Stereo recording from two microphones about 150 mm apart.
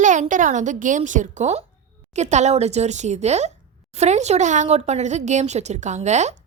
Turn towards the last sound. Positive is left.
turn(degrees=-50)  # may be behind; listen again after turning